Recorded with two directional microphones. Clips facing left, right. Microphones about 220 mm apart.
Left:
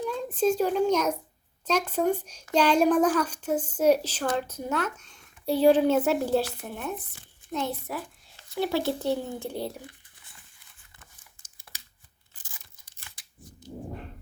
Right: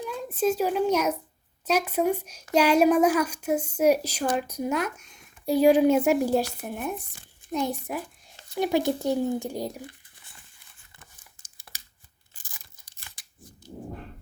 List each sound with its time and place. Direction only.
0.0 s a child's voice: 5° right (ahead or behind)
12.4 s tearing: 40° right (ahead or behind)